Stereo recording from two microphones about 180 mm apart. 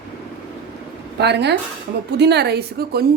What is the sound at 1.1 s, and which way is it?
A woman's voice, 70° right (ahead or behind).